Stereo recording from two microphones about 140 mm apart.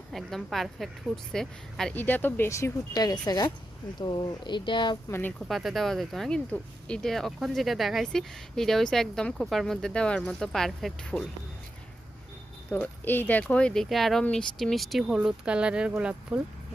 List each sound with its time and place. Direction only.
0.1 s speech: centre (ahead or behind); by 4.9 s 35° left (ahead or behind)
5.0 s speech: 20° left (ahead or behind)
5.5 s speech: centre (ahead or behind)
12.7 s speech: 15° left (ahead or behind); by 16.4 s 5° right (ahead or behind)